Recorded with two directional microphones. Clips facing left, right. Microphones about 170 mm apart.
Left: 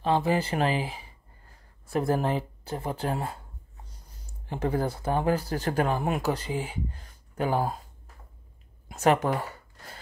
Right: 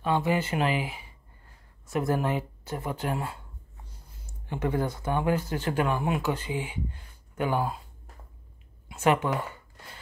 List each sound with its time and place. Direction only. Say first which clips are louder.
0.0 s speech: left 1 dB; 35° left (ahead or behind)
8.8 s speech: left 1 dB; 40° left (ahead or behind)